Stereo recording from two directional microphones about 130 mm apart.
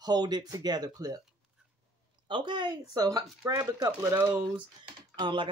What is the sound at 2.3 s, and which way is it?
Speech, 35° right (ahead or behind).